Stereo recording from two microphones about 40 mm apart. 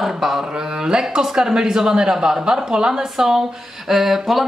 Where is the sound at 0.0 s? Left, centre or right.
Centre.